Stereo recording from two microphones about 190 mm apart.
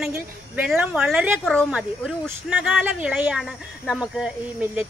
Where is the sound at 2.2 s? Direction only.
5° right (ahead or behind).